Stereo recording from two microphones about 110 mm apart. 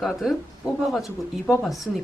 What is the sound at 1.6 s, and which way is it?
Speech, centre (ahead or behind).